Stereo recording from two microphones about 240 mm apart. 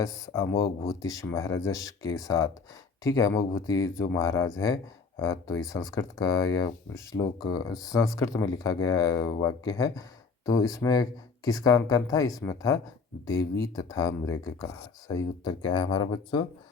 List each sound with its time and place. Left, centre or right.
0.9 s speech: centre